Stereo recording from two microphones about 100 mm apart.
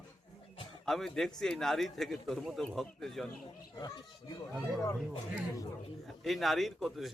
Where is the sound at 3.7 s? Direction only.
40° left (ahead or behind).